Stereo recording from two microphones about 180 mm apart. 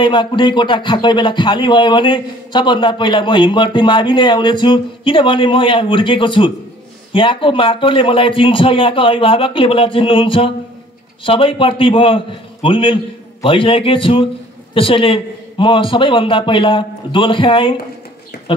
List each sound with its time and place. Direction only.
0.0 s speech: 25° left (ahead or behind)